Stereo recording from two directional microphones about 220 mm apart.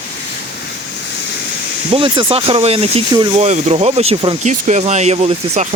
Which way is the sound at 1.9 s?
20° right (ahead or behind).